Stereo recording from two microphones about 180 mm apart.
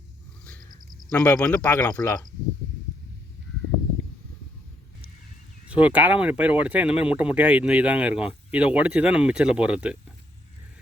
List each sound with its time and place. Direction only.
0.6 s a sound: 50° right (ahead or behind)
1.1 s speech: 15° left (ahead or behind)
5.6 s speech: 5° right (ahead or behind)